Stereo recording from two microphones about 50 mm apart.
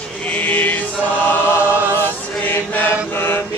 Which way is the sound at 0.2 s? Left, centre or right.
Left.